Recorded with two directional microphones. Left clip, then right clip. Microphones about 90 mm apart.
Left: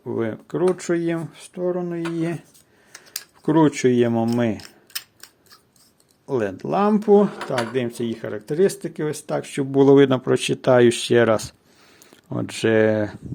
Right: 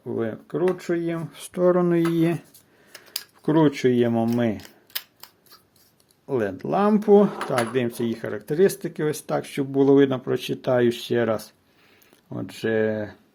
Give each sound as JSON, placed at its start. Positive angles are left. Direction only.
{"t": 0.0, "sound": "speech", "side_deg": 40}
{"t": 1.5, "sound": "speech", "side_deg": -55}
{"t": 3.4, "sound": "speech", "side_deg": 20}
{"t": 6.2, "sound": "speech", "side_deg": 20}
{"t": 9.7, "sound": "speech", "side_deg": 60}